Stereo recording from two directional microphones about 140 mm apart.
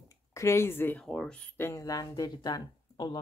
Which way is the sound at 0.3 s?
20° left (ahead or behind).